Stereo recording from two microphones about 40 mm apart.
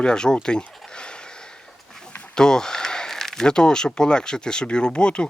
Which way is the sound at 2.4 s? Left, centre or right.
Centre.